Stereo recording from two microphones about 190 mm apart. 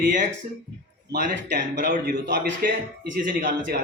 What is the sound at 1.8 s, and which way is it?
A man's voice, 50° right (ahead or behind).